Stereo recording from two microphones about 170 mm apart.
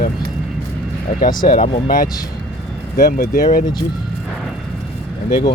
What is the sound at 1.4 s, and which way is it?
Speech, 45° left (ahead or behind).